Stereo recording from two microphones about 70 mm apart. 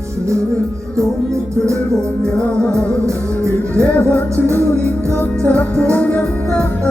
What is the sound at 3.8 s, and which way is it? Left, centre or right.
Music, left.